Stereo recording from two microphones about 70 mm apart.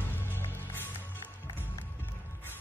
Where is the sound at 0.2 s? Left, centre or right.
Left.